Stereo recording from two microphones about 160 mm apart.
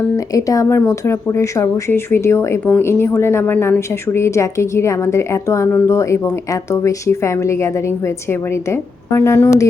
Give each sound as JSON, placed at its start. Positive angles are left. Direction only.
{"t": 0.3, "sound": "a woman's voice", "side_deg": 20}